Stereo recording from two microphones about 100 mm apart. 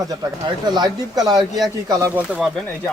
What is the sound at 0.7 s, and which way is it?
Speech, 45° right (ahead or behind).